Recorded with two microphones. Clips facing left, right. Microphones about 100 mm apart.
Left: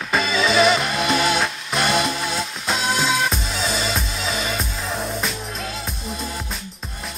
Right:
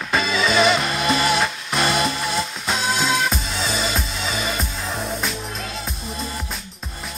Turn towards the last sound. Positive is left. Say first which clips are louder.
# even
turn(degrees=0)  # may be behind; listen again after turning